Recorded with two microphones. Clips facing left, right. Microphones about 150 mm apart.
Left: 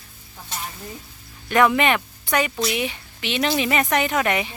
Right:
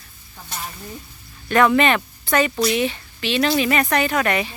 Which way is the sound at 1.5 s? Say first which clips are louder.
Right 2 dB; 15° left (ahead or behind).